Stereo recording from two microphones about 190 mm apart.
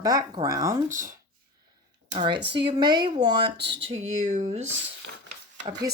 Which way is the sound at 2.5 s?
25° right (ahead or behind).